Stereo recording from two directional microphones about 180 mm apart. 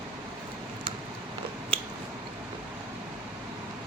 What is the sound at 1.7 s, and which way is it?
Squish, 30° right (ahead or behind).